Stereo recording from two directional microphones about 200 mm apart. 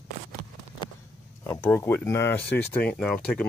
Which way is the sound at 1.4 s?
10° left (ahead or behind).